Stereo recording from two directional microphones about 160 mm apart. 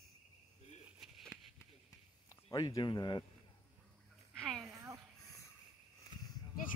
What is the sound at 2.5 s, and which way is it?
Speech, 25° left (ahead or behind).